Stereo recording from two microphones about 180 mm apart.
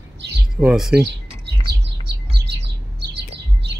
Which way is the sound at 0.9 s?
65° right (ahead or behind).